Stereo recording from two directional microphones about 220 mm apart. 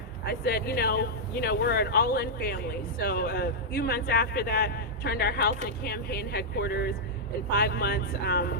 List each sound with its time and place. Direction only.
0.3 s speech: 45° left (ahead or behind)